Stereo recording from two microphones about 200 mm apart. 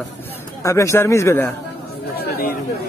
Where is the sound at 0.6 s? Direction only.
15° left (ahead or behind).